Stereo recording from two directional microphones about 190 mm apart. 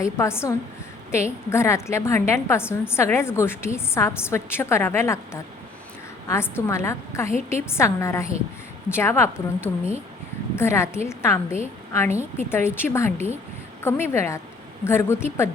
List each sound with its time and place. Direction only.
0.0 s a woman's voice: 15° left (ahead or behind)